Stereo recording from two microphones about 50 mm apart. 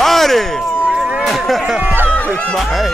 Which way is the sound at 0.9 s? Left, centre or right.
Centre.